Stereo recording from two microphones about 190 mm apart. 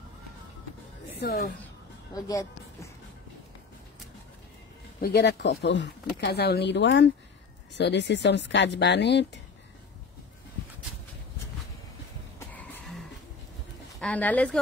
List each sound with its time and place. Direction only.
1.2 s speech: 55° left (ahead or behind)
2.1 s speech: 20° left (ahead or behind)
5.0 s speech: 60° left (ahead or behind)
12.4 s throat clearing: 10° left (ahead or behind)
13.9 s speech: 5° left (ahead or behind)